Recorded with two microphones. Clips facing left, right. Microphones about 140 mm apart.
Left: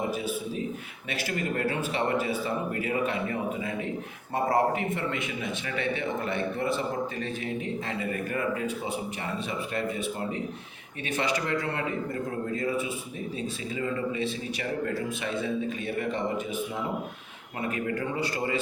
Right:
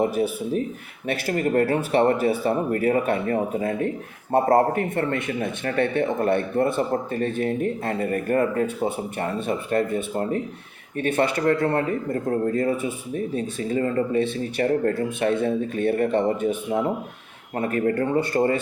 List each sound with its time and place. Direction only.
1.0 s speech: 55° right (ahead or behind)
17.6 s speech: 45° right (ahead or behind)